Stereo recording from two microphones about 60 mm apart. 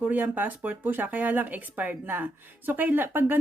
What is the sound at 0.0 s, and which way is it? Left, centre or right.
A woman's voice, right.